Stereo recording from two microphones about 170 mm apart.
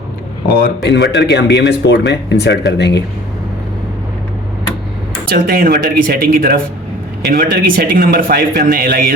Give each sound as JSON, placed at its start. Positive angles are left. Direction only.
{"t": 0.8, "sound": "speech", "side_deg": 90}
{"t": 5.3, "sound": "speech", "side_deg": -60}